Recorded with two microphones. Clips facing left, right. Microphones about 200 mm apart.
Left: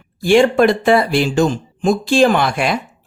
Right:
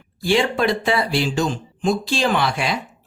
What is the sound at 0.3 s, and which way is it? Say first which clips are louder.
Speech: left 7 dB; 50° left (ahead or behind).